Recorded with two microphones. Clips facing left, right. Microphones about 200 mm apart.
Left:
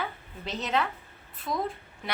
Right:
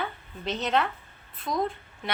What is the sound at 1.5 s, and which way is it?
Speech, 20° right (ahead or behind).